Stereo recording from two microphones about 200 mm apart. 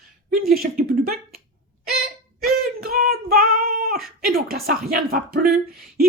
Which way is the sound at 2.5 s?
50° right (ahead or behind).